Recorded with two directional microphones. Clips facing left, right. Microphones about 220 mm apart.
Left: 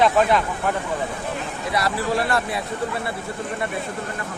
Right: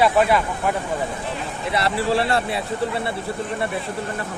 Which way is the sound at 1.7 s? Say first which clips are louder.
Right 2 dB; 30° right (ahead or behind).